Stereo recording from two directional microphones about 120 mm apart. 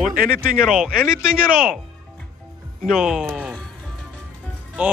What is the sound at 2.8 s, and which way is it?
Speech, 5° right (ahead or behind).